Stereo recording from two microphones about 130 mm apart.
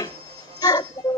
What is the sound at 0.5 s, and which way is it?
Music, 30° left (ahead or behind).